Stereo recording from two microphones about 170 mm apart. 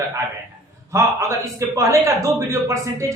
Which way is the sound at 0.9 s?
15° right (ahead or behind).